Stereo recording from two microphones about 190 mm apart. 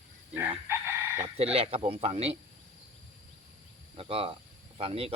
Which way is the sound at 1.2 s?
30° right (ahead or behind).